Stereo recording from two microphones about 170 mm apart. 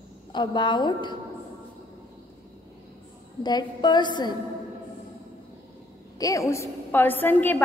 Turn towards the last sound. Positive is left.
turn(degrees=10)  # may be behind; listen again after turning